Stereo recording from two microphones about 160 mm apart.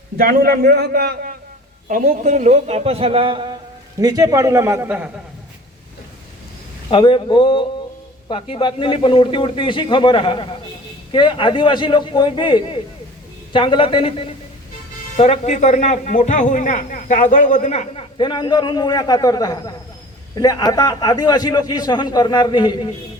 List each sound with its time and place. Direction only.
0.2 s a man's voice: 65° right (ahead or behind)
1.9 s a man's voice: 55° right (ahead or behind); by 5.1 s 10° right (ahead or behind)
6.9 s a man's voice: 30° left (ahead or behind)
15.1 s a man's voice: 45° left (ahead or behind)
18.2 s a man's voice: 30° left (ahead or behind)